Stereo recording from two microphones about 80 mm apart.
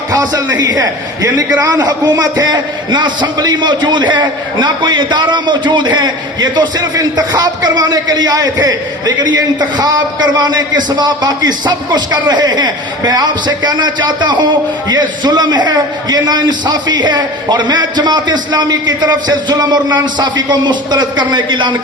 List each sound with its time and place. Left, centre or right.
0.1 s a man's voice: right